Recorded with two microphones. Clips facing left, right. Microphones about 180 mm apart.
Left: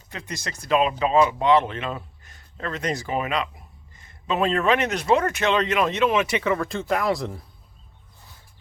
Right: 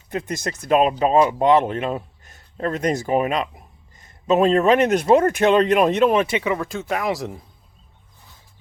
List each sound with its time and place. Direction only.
0.1 s speech: 50° right (ahead or behind)
6.2 s speech: 20° right (ahead or behind)